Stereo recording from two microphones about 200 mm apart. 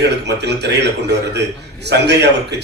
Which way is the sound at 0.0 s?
55° right (ahead or behind).